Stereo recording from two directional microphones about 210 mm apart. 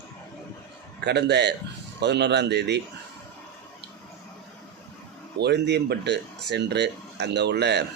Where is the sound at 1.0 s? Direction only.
55° right (ahead or behind).